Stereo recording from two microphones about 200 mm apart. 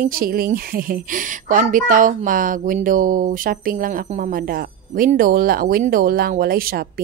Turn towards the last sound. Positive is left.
turn(degrees=-45)  # may be behind; listen again after turning